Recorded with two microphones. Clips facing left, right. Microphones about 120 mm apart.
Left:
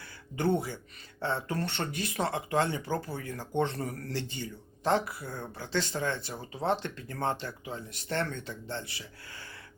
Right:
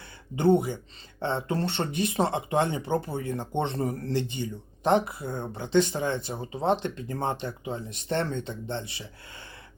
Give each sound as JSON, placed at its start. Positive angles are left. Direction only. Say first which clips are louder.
{"t": 0.3, "sound": "speech", "louder": "right 7 dB", "side_deg": -20}